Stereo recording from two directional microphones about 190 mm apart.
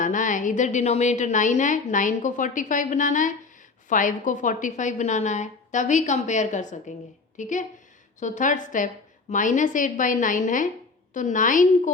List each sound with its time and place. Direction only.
0.0 s a woman's voice: 40° left (ahead or behind)